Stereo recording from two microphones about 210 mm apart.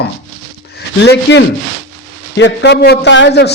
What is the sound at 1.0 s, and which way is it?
A man's voice, 55° left (ahead or behind).